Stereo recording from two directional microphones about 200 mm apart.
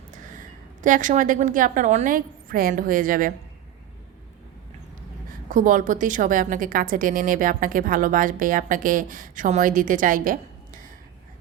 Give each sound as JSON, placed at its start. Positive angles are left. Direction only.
{"t": 0.1, "sound": "a woman's voice", "side_deg": -40}
{"t": 5.5, "sound": "a woman's voice", "side_deg": -40}